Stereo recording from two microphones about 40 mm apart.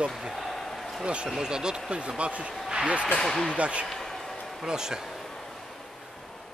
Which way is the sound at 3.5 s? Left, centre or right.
Right.